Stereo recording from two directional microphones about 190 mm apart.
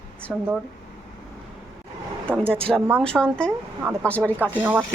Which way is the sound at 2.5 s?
5° left (ahead or behind).